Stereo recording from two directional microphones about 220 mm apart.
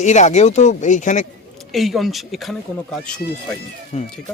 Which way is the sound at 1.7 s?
Centre (ahead or behind).